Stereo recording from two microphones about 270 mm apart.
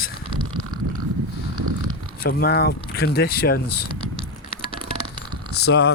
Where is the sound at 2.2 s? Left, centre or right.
Left.